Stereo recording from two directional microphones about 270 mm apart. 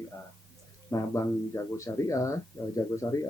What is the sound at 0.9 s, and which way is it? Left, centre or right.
Speech, centre.